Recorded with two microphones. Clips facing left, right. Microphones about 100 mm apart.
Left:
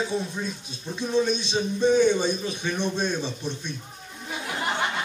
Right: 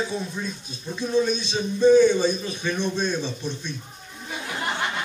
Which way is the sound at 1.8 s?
20° left (ahead or behind).